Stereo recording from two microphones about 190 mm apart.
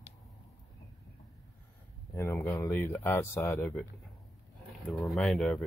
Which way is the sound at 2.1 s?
15° left (ahead or behind).